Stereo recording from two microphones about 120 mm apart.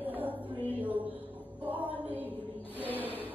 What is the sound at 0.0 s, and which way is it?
Music, 15° right (ahead or behind).